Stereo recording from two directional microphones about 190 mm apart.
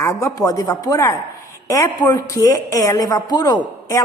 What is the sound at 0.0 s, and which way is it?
A woman's voice, 15° left (ahead or behind).